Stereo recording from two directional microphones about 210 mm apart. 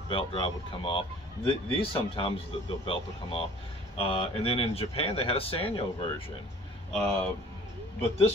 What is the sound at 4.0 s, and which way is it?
Speech, 30° left (ahead or behind).